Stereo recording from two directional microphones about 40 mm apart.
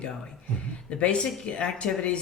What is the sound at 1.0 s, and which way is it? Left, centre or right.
Speech, left.